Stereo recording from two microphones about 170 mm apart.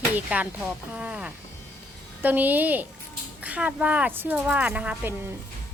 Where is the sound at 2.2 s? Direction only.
10° right (ahead or behind).